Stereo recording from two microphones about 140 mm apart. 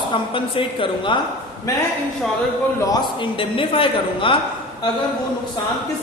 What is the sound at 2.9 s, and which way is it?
A man's voice, 35° left (ahead or behind).